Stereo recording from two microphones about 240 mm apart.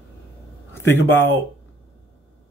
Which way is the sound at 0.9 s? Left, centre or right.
Centre.